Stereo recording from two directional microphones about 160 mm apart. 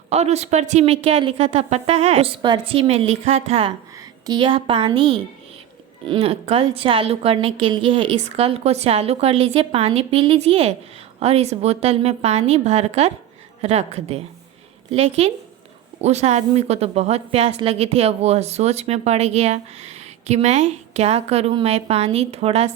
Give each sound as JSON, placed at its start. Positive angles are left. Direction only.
{"t": 0.1, "sound": "a woman's voice", "side_deg": -45}